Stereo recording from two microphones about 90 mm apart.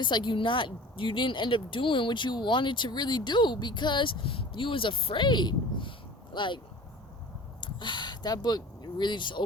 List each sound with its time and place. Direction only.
0.0 s speech: 60° left (ahead or behind)
7.6 s speech: 60° left (ahead or behind)